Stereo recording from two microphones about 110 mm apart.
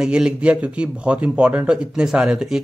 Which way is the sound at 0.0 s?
5° right (ahead or behind).